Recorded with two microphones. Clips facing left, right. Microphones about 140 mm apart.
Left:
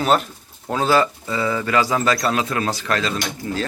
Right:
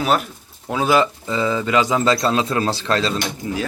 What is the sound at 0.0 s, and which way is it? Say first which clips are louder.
Speech: left 1 dB; 5° right (ahead or behind).